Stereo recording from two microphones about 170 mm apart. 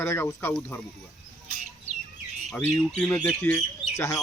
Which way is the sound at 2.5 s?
5° left (ahead or behind).